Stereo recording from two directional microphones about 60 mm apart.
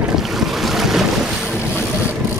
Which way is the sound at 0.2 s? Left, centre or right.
Centre.